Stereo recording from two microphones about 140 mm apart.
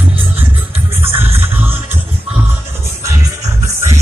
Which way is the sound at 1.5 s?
15° right (ahead or behind).